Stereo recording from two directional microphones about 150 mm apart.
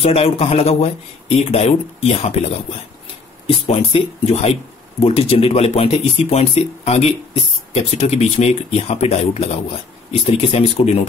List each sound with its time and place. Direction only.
0.0 s speech: 40° left (ahead or behind)
3.4 s speech: 45° left (ahead or behind)